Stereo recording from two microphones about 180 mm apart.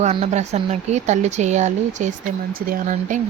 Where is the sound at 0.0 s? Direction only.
35° right (ahead or behind).